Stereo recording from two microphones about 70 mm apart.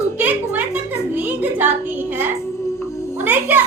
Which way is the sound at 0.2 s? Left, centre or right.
Right.